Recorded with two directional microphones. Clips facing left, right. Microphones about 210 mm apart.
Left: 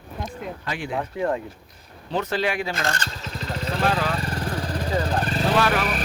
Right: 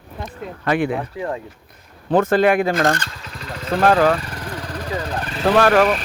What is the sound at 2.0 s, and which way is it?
Speech, 50° right (ahead or behind).